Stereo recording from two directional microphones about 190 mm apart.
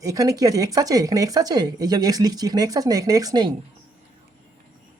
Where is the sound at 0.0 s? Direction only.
20° right (ahead or behind).